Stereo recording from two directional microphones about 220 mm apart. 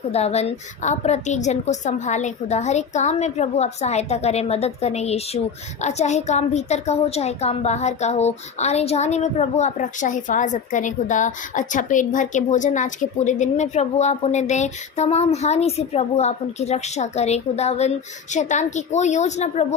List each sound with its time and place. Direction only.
0.1 s a woman's voice: 30° left (ahead or behind)